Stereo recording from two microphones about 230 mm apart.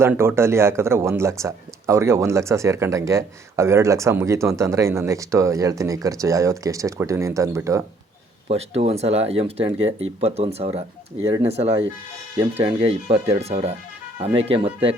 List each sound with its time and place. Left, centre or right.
0.0 s speech: centre
8.4 s speech: right